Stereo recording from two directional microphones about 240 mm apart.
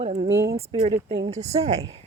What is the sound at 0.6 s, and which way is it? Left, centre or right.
Speech, right.